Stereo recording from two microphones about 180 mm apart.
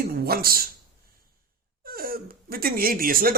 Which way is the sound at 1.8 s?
55° right (ahead or behind).